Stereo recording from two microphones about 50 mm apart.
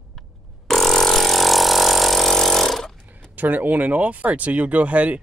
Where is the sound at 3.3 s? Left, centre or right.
Right.